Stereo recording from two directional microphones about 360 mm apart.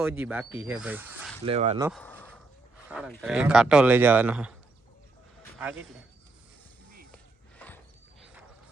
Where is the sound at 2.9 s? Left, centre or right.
Centre.